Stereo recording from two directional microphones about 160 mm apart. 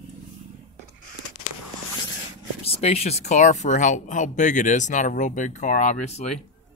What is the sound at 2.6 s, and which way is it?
Speech, 40° left (ahead or behind).